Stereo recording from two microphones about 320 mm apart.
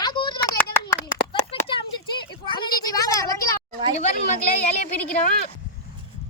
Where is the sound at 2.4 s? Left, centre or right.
Centre.